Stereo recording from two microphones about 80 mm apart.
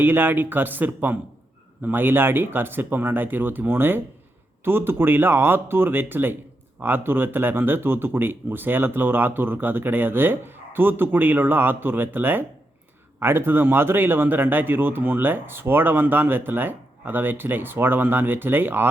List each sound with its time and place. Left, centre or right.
0.0 s speech: right